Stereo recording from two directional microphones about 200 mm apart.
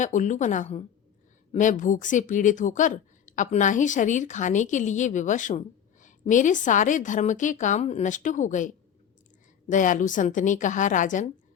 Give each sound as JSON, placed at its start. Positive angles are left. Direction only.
{"t": 0.0, "sound": "speech", "side_deg": 40}